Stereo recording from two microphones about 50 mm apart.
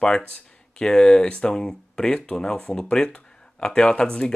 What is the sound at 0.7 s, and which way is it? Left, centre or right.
Speech, centre.